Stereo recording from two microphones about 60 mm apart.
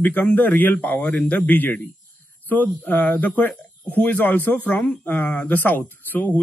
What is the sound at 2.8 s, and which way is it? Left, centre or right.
Speech, left.